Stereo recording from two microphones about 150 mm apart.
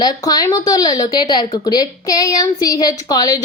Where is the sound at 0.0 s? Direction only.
25° left (ahead or behind).